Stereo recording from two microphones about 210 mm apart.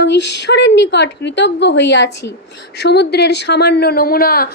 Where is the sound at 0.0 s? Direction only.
55° left (ahead or behind).